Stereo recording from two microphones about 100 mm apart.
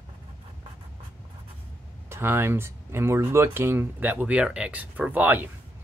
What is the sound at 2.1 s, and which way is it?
Speech, 25° right (ahead or behind).